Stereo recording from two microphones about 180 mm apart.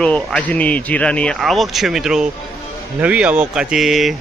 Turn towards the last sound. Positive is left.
turn(degrees=0)  # may be behind; listen again after turning